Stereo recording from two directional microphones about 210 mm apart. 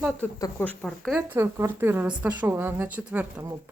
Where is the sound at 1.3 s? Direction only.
10° right (ahead or behind).